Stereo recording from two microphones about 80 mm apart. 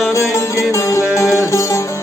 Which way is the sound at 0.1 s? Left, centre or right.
Left.